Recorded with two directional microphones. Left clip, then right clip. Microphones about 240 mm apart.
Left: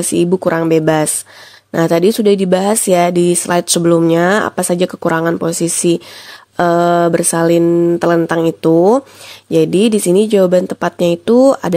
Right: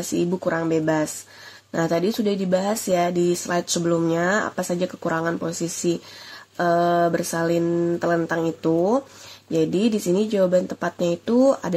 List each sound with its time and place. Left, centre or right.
0.0 s speech: left